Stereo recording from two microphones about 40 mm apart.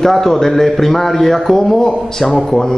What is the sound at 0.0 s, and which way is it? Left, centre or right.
A man's voice, centre.